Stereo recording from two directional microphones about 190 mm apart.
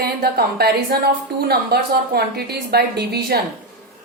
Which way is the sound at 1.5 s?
55° right (ahead or behind).